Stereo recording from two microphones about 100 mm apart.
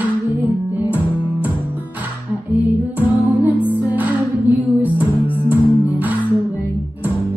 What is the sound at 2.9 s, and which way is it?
Music, 15° right (ahead or behind).